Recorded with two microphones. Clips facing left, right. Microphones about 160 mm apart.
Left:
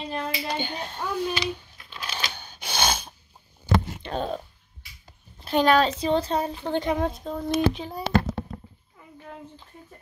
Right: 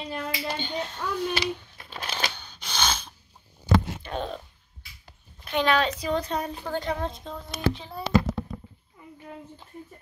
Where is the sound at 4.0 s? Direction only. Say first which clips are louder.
Left 3 dB; 40° left (ahead or behind).